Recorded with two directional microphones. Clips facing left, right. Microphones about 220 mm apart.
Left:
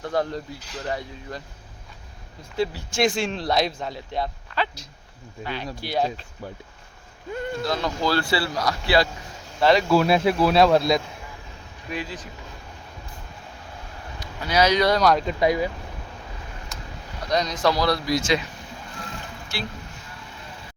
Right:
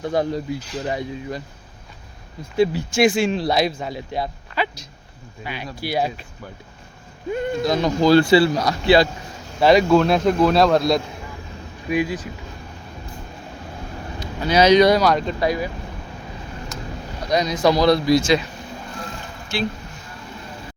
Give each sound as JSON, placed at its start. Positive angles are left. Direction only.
{"t": 0.0, "sound": "speech", "side_deg": -15}
{"t": 2.6, "sound": "speech", "side_deg": -10}
{"t": 7.3, "sound": "speech", "side_deg": -20}
{"t": 9.9, "sound": "speech", "side_deg": 5}
{"t": 11.9, "sound": "speech", "side_deg": -10}
{"t": 14.2, "sound": "speech", "side_deg": -25}
{"t": 15.0, "sound": "speech", "side_deg": 0}
{"t": 15.4, "sound": "speech", "side_deg": 20}
{"t": 17.2, "sound": "speech", "side_deg": -10}
{"t": 19.5, "sound": "speech", "side_deg": -20}